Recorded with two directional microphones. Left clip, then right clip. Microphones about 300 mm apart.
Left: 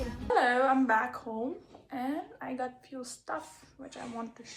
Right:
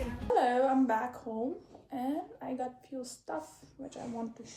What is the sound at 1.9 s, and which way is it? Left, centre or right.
Speech, centre.